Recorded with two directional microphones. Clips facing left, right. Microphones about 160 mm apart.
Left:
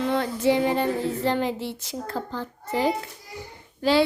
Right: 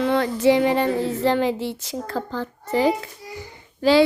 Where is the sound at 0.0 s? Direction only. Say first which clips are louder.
Right 4 dB; 90° right.